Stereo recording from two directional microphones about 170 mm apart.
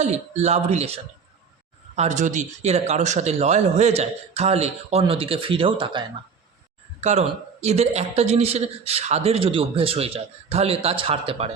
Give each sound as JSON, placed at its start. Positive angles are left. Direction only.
{"t": 0.0, "sound": "speech", "side_deg": -40}
{"t": 7.0, "sound": "speech", "side_deg": -40}